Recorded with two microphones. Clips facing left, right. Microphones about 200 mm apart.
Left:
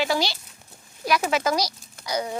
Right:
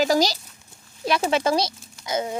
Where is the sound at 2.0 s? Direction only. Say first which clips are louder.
Right 2 dB; 20° right (ahead or behind).